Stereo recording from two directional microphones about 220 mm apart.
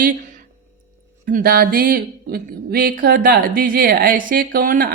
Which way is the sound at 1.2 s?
40° right (ahead or behind).